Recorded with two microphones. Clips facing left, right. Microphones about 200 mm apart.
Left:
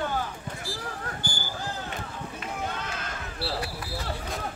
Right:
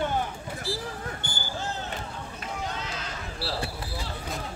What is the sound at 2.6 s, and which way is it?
Sheep, 55° left (ahead or behind).